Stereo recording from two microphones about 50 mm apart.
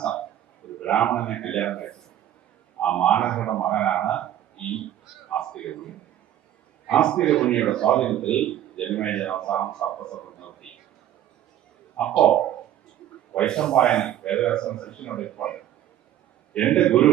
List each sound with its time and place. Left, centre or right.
0.8 s a man's voice: left
12.2 s a man's voice: centre